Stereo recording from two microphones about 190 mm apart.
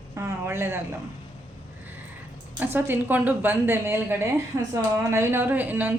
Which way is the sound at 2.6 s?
10° right (ahead or behind).